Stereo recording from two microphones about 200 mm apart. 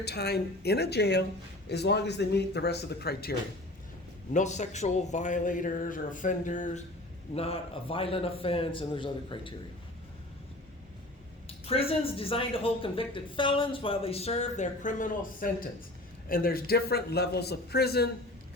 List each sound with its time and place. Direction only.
0.0 s speech: 55° left (ahead or behind)
4.4 s a man's voice: 35° left (ahead or behind)
11.6 s speech: 30° left (ahead or behind); by 18.1 s 50° left (ahead or behind)